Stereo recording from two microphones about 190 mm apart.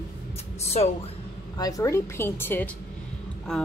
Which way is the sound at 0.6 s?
35° left (ahead or behind).